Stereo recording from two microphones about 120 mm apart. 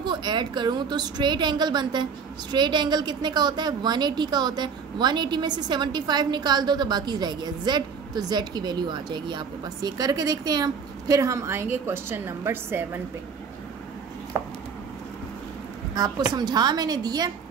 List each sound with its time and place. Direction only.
0.0 s a woman's voice: 40° right (ahead or behind); by 13.0 s 20° right (ahead or behind)
14.3 s chopping: 25° right (ahead or behind)
16.3 s a woman's voice: 35° right (ahead or behind)